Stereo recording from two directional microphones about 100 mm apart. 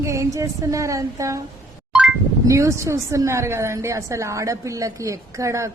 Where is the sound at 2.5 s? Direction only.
30° right (ahead or behind).